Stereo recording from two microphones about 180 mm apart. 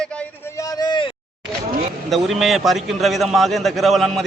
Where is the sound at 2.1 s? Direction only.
Centre (ahead or behind).